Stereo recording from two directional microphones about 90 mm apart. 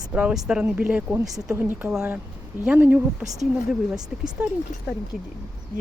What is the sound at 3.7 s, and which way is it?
Speech, 10° right (ahead or behind).